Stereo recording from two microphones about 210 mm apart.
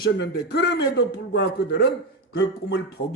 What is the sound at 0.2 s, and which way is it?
A man's voice, 55° left (ahead or behind).